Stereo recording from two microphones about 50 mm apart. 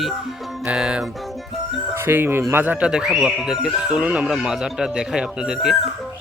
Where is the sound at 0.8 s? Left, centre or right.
Centre.